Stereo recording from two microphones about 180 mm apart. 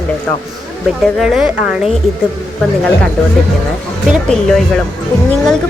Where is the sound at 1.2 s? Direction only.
5° right (ahead or behind).